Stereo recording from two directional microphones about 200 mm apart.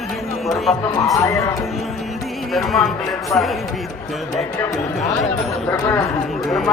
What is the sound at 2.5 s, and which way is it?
Speech, centre (ahead or behind).